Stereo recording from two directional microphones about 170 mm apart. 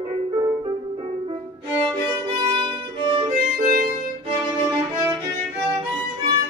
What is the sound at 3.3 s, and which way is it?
Music, 50° right (ahead or behind).